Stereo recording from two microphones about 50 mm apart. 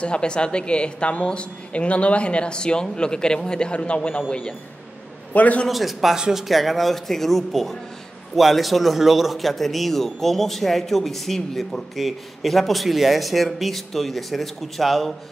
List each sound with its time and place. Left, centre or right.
0.0 s a woman's voice: centre
5.3 s a man's voice: left
5.7 s a man's voice: centre